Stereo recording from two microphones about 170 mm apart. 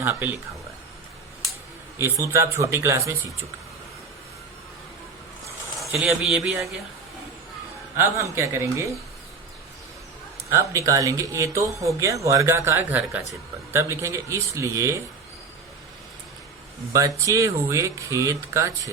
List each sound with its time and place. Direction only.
0.0 s speech: 10° right (ahead or behind)
2.0 s speech: 15° right (ahead or behind)
5.9 s speech: 5° right (ahead or behind)
7.9 s speech: 15° right (ahead or behind)
10.5 s speech: 20° right (ahead or behind)
17.2 s speech: 20° right (ahead or behind)